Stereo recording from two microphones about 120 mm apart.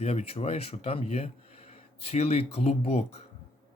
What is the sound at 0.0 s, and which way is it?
Speech, 60° left (ahead or behind).